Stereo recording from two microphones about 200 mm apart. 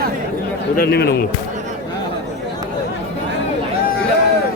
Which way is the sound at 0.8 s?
50° left (ahead or behind).